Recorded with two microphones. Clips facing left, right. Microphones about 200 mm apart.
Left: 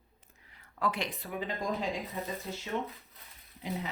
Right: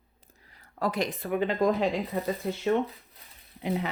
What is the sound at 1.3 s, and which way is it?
Speech, 65° right (ahead or behind).